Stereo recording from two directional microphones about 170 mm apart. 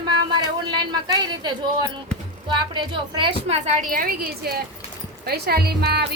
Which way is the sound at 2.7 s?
30° right (ahead or behind).